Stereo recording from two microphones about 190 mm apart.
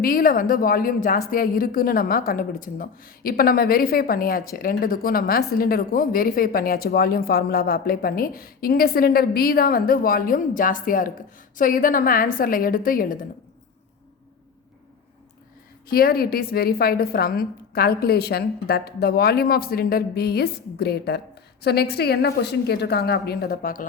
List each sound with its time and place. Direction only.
0.0 s speech: 50° left (ahead or behind)
15.9 s a woman's voice: 50° left (ahead or behind)